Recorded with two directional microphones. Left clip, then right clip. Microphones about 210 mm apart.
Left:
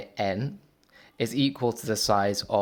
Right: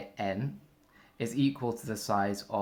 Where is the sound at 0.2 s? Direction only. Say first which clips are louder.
Left 6 dB; 45° left (ahead or behind).